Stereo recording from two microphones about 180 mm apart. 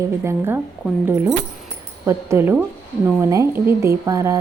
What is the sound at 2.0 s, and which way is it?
Speech, 15° right (ahead or behind).